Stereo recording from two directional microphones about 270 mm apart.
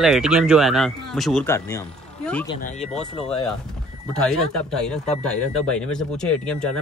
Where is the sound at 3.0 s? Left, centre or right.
Left.